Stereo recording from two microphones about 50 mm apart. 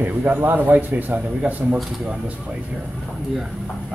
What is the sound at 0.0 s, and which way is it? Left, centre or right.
A man's voice, right.